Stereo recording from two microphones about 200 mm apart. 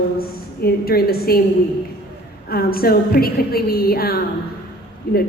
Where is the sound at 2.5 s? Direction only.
50° left (ahead or behind).